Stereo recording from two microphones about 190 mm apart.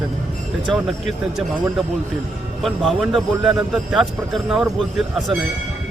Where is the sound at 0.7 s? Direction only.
Centre (ahead or behind).